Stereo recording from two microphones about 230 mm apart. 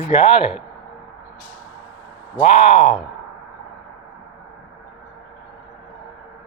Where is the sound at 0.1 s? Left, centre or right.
Left.